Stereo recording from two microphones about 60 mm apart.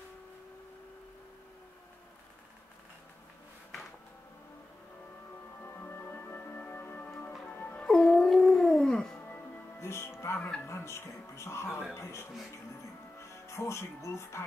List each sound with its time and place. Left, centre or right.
5.6 s music: left
7.8 s music: centre
9.8 s music: left
11.9 s speech: left